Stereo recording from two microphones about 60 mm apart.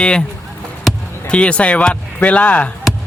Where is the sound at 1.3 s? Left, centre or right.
Centre.